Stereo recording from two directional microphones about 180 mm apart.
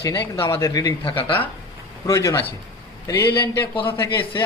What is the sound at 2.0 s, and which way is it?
A woman's voice, 15° left (ahead or behind).